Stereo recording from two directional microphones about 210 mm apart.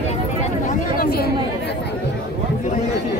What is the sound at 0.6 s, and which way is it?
Speech, 45° left (ahead or behind).